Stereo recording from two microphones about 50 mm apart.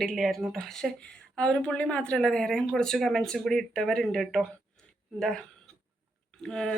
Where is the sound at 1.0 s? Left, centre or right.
Left.